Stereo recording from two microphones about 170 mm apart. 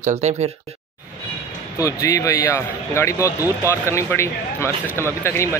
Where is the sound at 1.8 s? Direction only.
20° left (ahead or behind).